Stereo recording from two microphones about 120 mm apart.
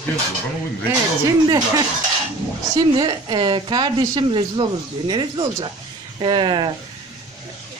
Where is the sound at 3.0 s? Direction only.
40° right (ahead or behind).